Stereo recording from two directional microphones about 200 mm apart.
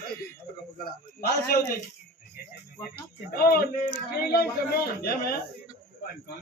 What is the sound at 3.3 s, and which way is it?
A man's voice, 50° left (ahead or behind).